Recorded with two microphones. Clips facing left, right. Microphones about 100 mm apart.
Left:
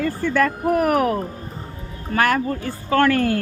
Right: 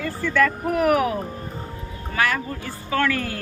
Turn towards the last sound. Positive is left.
turn(degrees=50)  # may be behind; listen again after turning